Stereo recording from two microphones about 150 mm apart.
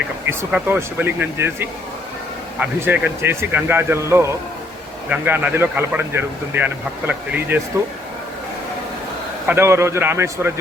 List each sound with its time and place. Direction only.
0.3 s speech: 15° right (ahead or behind)
9.5 s speech: 15° right (ahead or behind)